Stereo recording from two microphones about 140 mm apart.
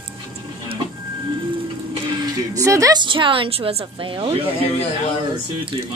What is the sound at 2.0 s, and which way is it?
Speech, 25° right (ahead or behind).